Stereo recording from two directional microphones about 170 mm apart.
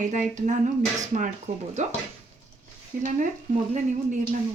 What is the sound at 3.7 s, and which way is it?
Speech, 45° right (ahead or behind).